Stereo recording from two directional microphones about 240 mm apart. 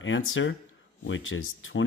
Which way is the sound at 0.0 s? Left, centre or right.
Left.